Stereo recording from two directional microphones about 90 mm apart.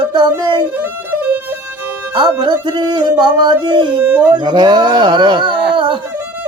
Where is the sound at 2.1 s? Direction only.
50° right (ahead or behind).